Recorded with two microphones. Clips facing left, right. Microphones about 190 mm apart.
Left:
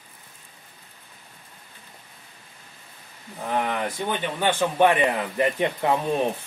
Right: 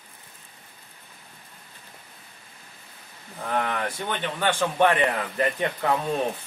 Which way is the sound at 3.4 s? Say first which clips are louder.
Left 1 dB; 15° left (ahead or behind).